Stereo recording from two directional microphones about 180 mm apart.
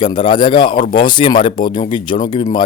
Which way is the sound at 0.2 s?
30° left (ahead or behind).